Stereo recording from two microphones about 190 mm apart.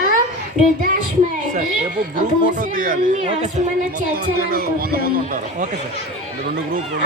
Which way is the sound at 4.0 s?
50° right (ahead or behind).